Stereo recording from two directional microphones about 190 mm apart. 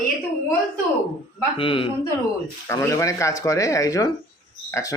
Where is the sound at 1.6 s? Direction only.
30° left (ahead or behind).